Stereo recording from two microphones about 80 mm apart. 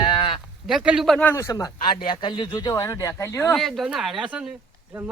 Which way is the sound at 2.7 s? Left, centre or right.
Left.